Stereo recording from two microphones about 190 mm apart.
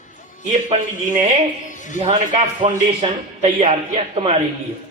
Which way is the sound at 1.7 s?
40° left (ahead or behind).